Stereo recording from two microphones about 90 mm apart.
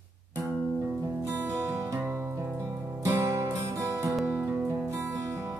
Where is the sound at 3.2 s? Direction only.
35° right (ahead or behind).